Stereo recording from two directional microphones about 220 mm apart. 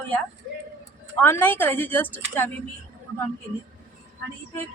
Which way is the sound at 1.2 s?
10° left (ahead or behind).